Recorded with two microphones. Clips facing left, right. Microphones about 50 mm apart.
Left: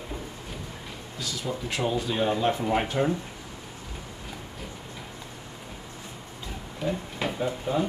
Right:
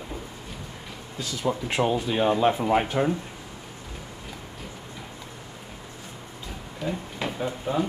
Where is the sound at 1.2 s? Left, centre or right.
Right.